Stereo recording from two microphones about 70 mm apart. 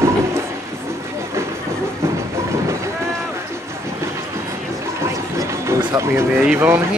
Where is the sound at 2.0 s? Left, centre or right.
Right.